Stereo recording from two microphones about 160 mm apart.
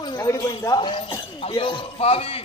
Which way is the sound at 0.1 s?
20° left (ahead or behind).